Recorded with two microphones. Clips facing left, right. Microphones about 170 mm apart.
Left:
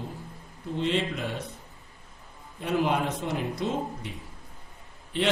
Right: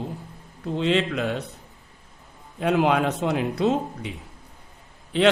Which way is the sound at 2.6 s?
90° right.